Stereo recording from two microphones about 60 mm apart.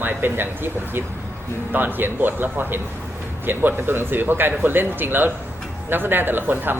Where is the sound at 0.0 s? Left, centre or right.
Right.